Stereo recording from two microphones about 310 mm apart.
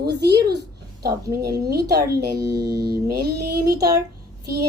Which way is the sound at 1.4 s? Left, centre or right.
Right.